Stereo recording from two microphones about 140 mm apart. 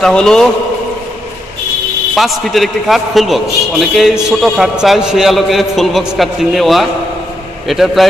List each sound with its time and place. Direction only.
0.0 s a man's voice: 5° left (ahead or behind)
2.1 s a man's voice: centre (ahead or behind)